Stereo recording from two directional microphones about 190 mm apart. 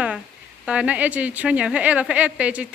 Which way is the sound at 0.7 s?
5° right (ahead or behind).